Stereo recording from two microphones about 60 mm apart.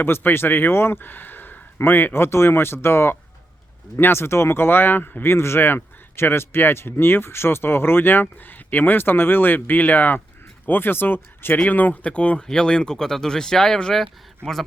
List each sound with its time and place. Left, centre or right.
0.0 s speech: left
11.5 s speech: left; by 14.6 s centre